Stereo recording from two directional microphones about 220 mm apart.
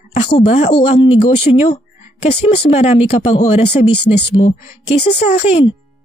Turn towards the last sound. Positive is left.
turn(degrees=25)  # may be behind; listen again after turning